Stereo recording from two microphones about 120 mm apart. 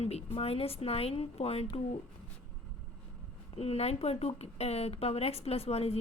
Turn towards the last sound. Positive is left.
turn(degrees=60)  # may be behind; listen again after turning